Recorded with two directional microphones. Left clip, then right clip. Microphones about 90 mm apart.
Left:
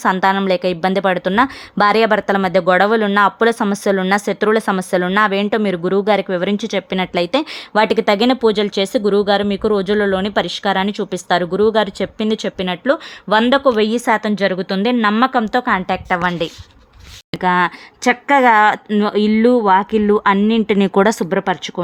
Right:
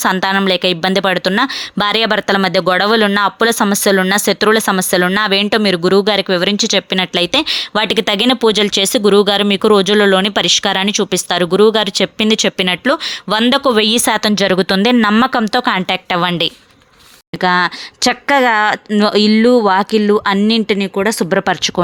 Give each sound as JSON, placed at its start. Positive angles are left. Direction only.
{"t": 0.0, "sound": "a woman's voice", "side_deg": -20}
{"t": 6.6, "sound": "a woman's voice", "side_deg": -15}
{"t": 14.3, "sound": "speech", "side_deg": -50}
{"t": 15.1, "sound": "speech", "side_deg": -40}
{"t": 17.4, "sound": "speech", "side_deg": -20}
{"t": 18.3, "sound": "speech", "side_deg": 0}
{"t": 18.9, "sound": "speech", "side_deg": -40}
{"t": 19.3, "sound": "speech", "side_deg": -25}
{"t": 20.0, "sound": "speech", "side_deg": 0}
{"t": 20.7, "sound": "speech", "side_deg": 15}
{"t": 21.2, "sound": "speech", "side_deg": -30}